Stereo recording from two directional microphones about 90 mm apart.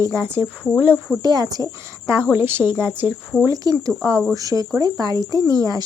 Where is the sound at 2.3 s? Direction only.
25° right (ahead or behind).